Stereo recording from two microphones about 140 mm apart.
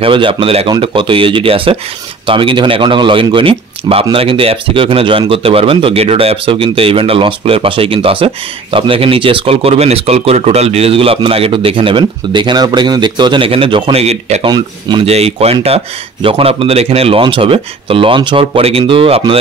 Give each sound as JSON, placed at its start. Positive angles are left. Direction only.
{"t": 0.0, "sound": "speech", "side_deg": -40}